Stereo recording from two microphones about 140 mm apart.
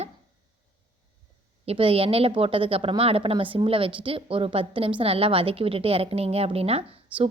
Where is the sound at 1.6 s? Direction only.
40° right (ahead or behind).